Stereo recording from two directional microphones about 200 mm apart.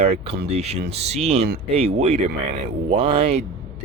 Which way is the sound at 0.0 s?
30° right (ahead or behind).